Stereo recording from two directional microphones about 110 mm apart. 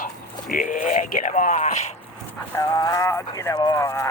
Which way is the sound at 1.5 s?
90° left.